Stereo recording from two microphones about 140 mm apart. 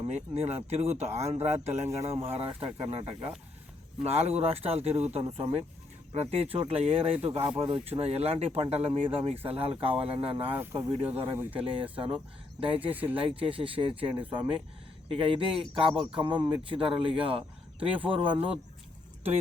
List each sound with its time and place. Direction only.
0.1 s speech: 50° right (ahead or behind)
10.5 s speech: 15° right (ahead or behind)
10.8 s speech: 35° right (ahead or behind)
12.9 s speech: 10° right (ahead or behind)
13.1 s speech: 40° right (ahead or behind)